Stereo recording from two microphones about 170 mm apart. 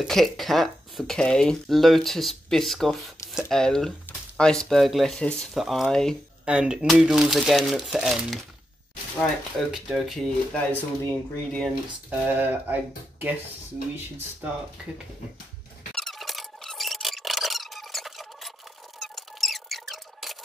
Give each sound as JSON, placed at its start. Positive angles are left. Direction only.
{"t": 0.0, "sound": "speech", "side_deg": 0}
{"t": 9.7, "sound": "speech", "side_deg": 0}
{"t": 12.1, "sound": "speech", "side_deg": -10}
{"t": 15.9, "sound": "squeak", "side_deg": 0}